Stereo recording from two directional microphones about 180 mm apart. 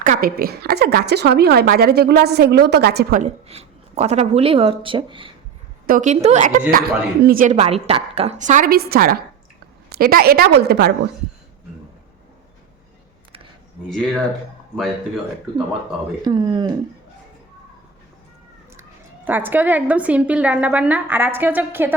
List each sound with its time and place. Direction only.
0.0 s a woman's voice: 50° right (ahead or behind)
3.2 s speech: 35° right (ahead or behind)
5.8 s speech: 45° right (ahead or behind)
7.5 s a woman's voice: 35° right (ahead or behind); by 10.9 s 65° right (ahead or behind)
13.9 s speech: centre (ahead or behind)
16.2 s speech: 25° right (ahead or behind)
18.8 s a woman's voice: 10° right (ahead or behind)